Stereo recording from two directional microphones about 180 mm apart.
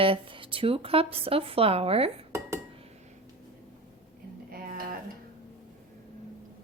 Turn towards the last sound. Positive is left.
turn(degrees=-50)  # may be behind; listen again after turning